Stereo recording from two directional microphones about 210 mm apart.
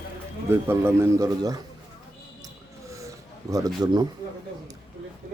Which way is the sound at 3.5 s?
20° right (ahead or behind).